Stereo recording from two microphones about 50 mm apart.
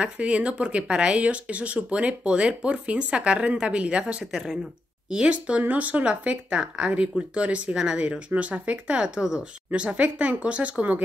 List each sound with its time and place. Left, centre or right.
0.0 s speech: right
7.7 s speech: centre
8.3 s speech: right
9.7 s speech: right